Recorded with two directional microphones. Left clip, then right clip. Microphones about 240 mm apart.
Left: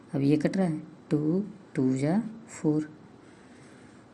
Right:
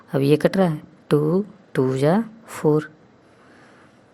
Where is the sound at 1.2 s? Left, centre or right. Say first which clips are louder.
Right 6 dB; right.